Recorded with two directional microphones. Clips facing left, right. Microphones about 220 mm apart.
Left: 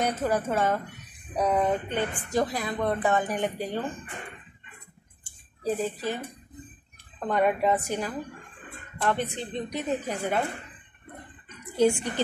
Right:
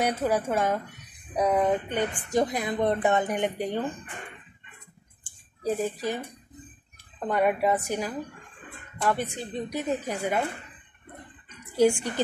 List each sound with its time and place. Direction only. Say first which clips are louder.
0.0 s a woman's voice: right 1 dB; 10° right (ahead or behind)
5.2 s a sound: even; 15° right (ahead or behind)
7.2 s a woman's voice: even; 10° right (ahead or behind)
11.7 s a woman's voice: right 1 dB; 10° right (ahead or behind)